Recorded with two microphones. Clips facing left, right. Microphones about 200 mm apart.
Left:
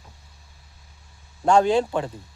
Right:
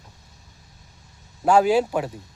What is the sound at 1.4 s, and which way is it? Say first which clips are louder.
Speech: right 1 dB; 5° right (ahead or behind).